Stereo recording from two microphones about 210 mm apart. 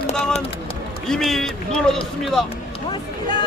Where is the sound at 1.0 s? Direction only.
Centre (ahead or behind).